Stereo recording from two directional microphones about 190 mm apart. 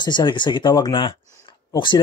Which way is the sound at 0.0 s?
25° left (ahead or behind).